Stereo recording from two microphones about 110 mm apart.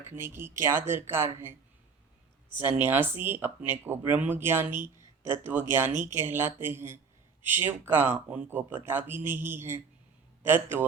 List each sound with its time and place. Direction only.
0.0 s speech: 20° right (ahead or behind)
2.6 s speech: 20° right (ahead or behind)
5.9 s speech: 90° right
6.1 s speech: 20° right (ahead or behind)